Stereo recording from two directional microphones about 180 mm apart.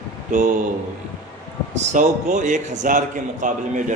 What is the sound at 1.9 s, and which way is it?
A man's voice, 45° right (ahead or behind).